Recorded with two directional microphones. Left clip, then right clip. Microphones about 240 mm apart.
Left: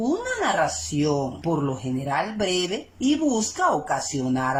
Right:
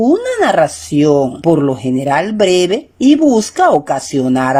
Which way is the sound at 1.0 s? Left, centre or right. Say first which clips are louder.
Right 14 dB; right.